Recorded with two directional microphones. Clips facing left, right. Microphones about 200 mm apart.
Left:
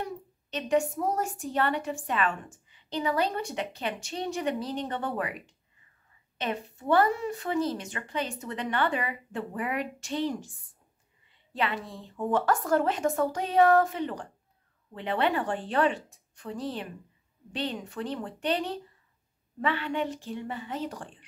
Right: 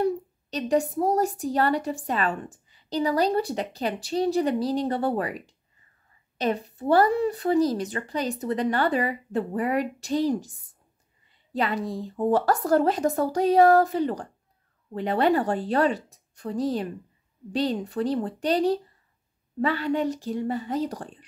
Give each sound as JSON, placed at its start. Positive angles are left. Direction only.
{"t": 0.0, "sound": "a woman's voice", "side_deg": -35}
{"t": 11.5, "sound": "a woman's voice", "side_deg": -40}